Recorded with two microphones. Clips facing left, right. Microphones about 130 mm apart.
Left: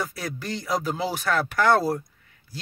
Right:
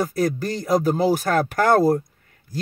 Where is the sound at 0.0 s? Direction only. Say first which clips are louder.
Right 9 dB; 45° right (ahead or behind).